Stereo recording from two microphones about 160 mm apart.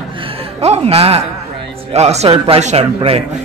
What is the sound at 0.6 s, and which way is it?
A man's voice, 40° right (ahead or behind).